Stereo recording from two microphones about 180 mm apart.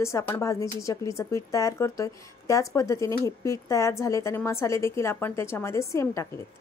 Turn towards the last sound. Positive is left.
turn(degrees=15)  # may be behind; listen again after turning